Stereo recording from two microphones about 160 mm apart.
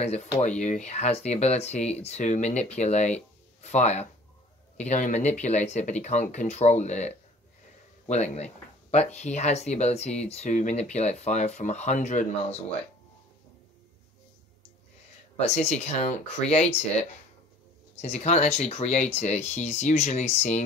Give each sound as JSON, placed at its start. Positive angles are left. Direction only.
{"t": 0.0, "sound": "speech", "side_deg": 45}
{"t": 15.3, "sound": "speech", "side_deg": 45}
{"t": 18.0, "sound": "speech", "side_deg": 45}